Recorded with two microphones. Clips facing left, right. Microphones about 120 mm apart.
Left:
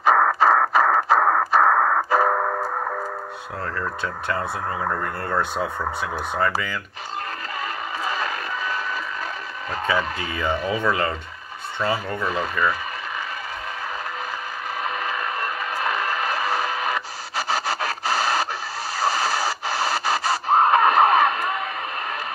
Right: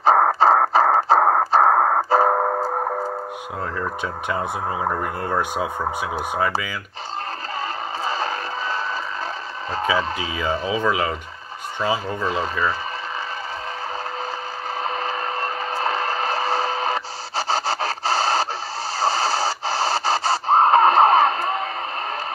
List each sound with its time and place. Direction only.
0.0 s a sound: 30° right (ahead or behind)
3.7 s speech: 15° right (ahead or behind)
8.0 s a sound: 30° right (ahead or behind)
10.3 s speech: centre (ahead or behind)
10.8 s speech: 10° right (ahead or behind)
12.2 s speech: 30° right (ahead or behind)
14.8 s vehicle: 30° right (ahead or behind)
18.9 s pant: 30° right (ahead or behind)